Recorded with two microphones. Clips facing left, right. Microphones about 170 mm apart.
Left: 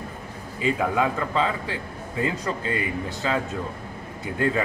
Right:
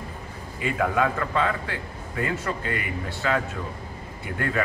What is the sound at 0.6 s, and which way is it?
A man's voice, 20° left (ahead or behind).